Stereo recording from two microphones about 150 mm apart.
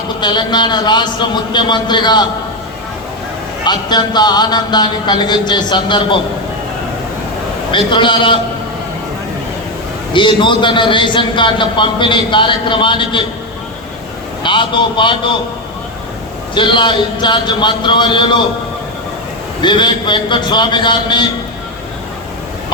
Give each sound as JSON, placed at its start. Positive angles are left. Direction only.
{"t": 0.2, "sound": "speech", "side_deg": 30}
{"t": 3.6, "sound": "speech", "side_deg": 30}
{"t": 7.7, "sound": "a man's voice", "side_deg": 35}
{"t": 10.1, "sound": "a man's voice", "side_deg": 35}
{"t": 14.4, "sound": "a man's voice", "side_deg": 35}
{"t": 16.6, "sound": "a man's voice", "side_deg": 35}
{"t": 19.6, "sound": "a man's voice", "side_deg": 30}